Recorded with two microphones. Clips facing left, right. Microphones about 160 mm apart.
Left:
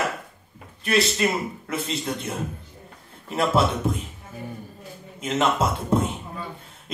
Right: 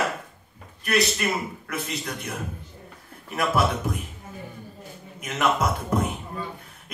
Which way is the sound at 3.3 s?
25° left (ahead or behind).